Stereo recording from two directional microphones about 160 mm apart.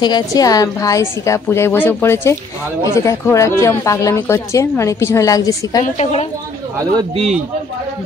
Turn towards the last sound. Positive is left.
turn(degrees=-40)  # may be behind; listen again after turning